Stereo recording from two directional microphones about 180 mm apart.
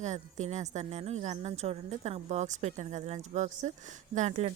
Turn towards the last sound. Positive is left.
turn(degrees=-35)  # may be behind; listen again after turning